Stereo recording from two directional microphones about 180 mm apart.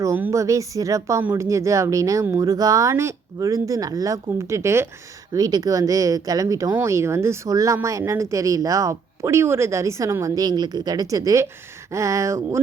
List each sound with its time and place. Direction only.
0.0 s speech: 15° right (ahead or behind)